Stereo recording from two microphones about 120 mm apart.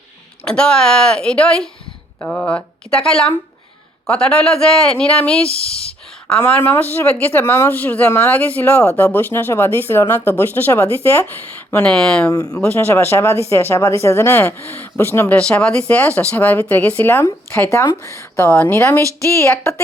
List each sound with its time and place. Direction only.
0.4 s speech: 5° left (ahead or behind)
12.3 s speech: 30° left (ahead or behind)
12.7 s speech: 20° left (ahead or behind)
15.4 s speech: 10° left (ahead or behind)